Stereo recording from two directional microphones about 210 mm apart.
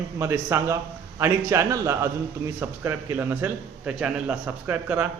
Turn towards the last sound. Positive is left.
turn(degrees=-10)  # may be behind; listen again after turning